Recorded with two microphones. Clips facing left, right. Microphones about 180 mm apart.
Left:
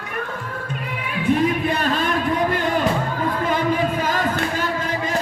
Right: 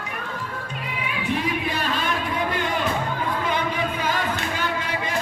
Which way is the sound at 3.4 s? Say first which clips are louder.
Left 7 dB; 45° left (ahead or behind).